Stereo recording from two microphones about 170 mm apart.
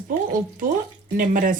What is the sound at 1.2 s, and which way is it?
Speech, 55° right (ahead or behind).